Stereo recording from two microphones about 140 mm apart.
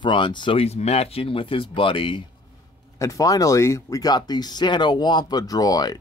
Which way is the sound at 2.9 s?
25° left (ahead or behind).